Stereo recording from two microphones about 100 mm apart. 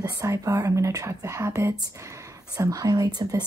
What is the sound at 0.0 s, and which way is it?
Speech, 30° right (ahead or behind).